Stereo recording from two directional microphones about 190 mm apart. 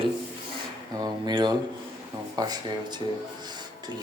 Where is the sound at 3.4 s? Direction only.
20° right (ahead or behind).